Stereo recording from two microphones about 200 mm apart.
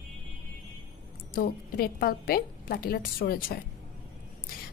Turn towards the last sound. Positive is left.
turn(degrees=50)  # may be behind; listen again after turning